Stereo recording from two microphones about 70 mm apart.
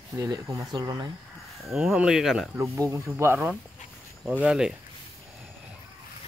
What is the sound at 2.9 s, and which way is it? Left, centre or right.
Speech, right.